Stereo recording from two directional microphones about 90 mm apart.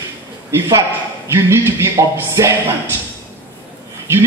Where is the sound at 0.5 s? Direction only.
35° right (ahead or behind).